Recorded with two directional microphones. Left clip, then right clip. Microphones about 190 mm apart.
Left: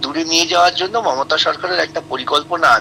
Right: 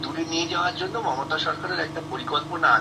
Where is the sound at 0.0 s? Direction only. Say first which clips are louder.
Left 10 dB; 65° left (ahead or behind).